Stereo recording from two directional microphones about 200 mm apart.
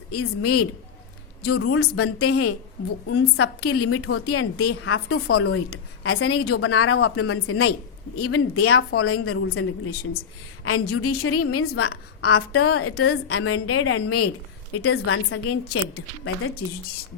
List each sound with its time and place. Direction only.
0.1 s speech: 90° left